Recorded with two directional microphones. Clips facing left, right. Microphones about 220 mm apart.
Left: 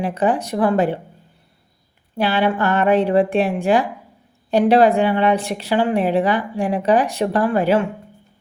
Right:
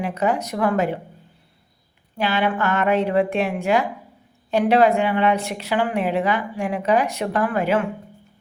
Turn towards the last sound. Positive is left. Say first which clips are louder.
# left 4 dB
turn(degrees=35)  # may be behind; listen again after turning